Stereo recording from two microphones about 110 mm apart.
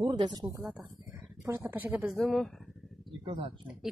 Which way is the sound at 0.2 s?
40° right (ahead or behind).